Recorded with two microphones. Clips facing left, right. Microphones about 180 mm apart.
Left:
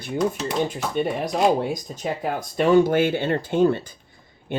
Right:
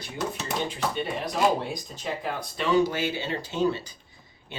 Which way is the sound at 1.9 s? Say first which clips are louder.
Left 5 dB; 45° left (ahead or behind).